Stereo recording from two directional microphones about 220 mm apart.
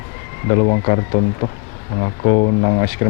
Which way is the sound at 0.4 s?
20° left (ahead or behind).